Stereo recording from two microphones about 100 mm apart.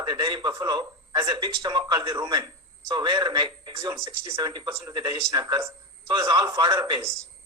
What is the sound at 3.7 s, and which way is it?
Speech, 30° right (ahead or behind).